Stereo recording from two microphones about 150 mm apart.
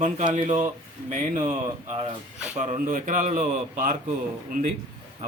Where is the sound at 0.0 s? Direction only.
55° right (ahead or behind).